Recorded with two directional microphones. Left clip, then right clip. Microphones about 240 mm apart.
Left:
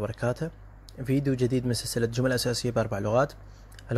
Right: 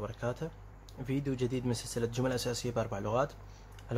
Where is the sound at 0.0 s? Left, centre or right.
Centre.